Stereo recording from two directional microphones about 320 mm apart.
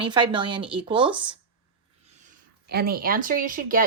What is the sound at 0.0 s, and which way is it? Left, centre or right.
Speech, centre.